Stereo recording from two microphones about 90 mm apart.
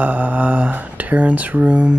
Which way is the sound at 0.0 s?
15° right (ahead or behind).